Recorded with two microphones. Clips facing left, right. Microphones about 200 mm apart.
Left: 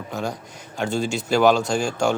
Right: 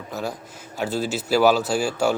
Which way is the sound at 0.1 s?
5° right (ahead or behind).